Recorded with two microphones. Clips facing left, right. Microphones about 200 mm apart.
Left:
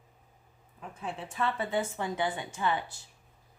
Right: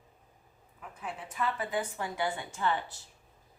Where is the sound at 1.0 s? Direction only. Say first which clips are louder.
Left 2 dB; 30° left (ahead or behind).